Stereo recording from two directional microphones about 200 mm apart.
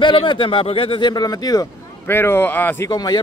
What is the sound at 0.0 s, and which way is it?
A man's voice, 25° left (ahead or behind).